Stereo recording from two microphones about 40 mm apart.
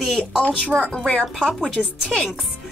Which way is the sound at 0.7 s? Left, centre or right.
Right.